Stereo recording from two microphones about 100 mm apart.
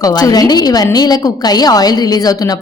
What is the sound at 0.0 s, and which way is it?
A woman's voice, 40° left (ahead or behind).